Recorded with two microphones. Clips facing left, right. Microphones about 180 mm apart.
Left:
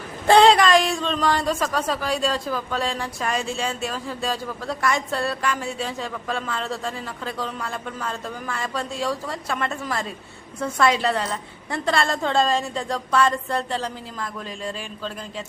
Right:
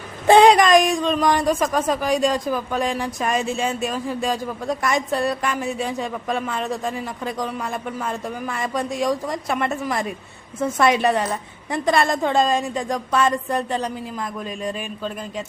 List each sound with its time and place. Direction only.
0.3 s a man's voice: 20° right (ahead or behind)